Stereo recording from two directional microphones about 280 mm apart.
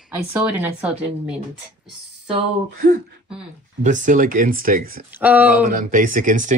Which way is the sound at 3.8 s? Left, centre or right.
Right.